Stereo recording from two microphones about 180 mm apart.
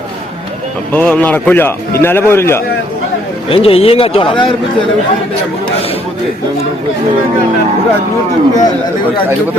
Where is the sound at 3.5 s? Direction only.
30° left (ahead or behind).